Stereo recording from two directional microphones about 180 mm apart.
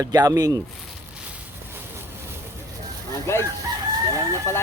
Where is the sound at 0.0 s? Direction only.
20° right (ahead or behind).